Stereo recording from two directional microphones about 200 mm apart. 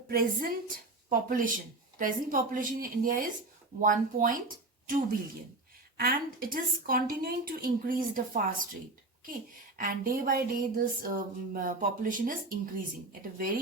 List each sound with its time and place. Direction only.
0.1 s a woman's voice: 50° right (ahead or behind)